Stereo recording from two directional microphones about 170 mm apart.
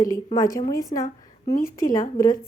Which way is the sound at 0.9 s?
40° left (ahead or behind).